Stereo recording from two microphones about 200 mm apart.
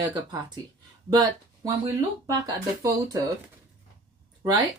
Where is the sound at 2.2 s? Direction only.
20° right (ahead or behind).